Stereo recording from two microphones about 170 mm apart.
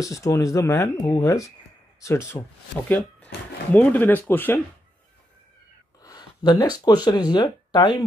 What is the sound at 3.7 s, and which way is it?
Speech, 10° left (ahead or behind).